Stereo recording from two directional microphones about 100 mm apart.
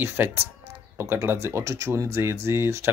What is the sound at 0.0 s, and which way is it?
A man's voice, 20° right (ahead or behind).